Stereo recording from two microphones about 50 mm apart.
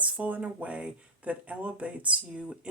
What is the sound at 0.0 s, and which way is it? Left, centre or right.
Speech, right.